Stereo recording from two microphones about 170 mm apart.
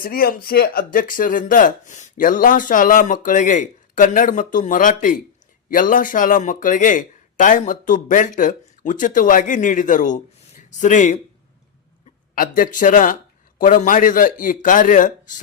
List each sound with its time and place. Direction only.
0.0 s speech: 60° left (ahead or behind)
12.3 s speech: 55° left (ahead or behind)